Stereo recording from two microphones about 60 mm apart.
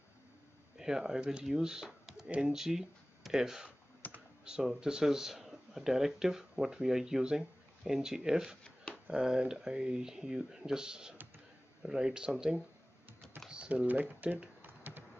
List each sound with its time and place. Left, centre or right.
0.7 s speech: centre
1.9 s computer keyboard: centre
2.5 s speech: centre
4.0 s computer keyboard: left
4.5 s speech: centre
13.5 s typing: centre
13.8 s speech: right
14.6 s typing: right